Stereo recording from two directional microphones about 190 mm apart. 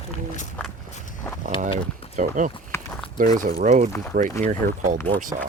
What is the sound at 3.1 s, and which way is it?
Speech, 45° right (ahead or behind).